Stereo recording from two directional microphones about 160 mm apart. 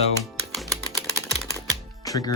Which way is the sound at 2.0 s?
20° left (ahead or behind).